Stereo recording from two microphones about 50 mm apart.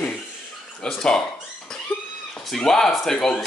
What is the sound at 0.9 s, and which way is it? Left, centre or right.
Speech, centre.